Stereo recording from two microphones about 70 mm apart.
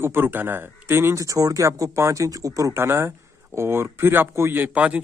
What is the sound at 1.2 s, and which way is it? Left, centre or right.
Speech, right.